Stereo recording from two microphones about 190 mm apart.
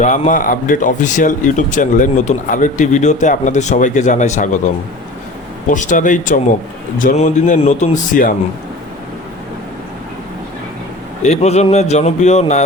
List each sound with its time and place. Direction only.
0.0 s speech: 40° left (ahead or behind)
5.6 s speech: 40° left (ahead or behind)
11.2 s speech: 35° left (ahead or behind)